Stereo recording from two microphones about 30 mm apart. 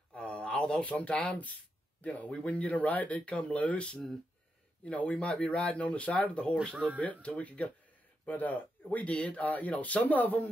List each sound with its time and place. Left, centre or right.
0.2 s a sound: left
0.8 s speech: left
3.3 s speech: left
4.9 s speech: left
8.3 s speech: left